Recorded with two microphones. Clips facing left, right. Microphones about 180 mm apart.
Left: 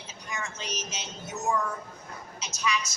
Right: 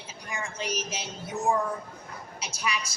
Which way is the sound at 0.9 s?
30° right (ahead or behind).